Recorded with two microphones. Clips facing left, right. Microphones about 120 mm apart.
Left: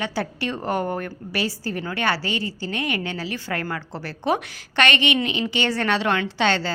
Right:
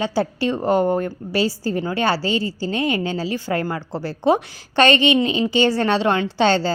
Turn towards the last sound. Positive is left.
turn(degrees=-35)  # may be behind; listen again after turning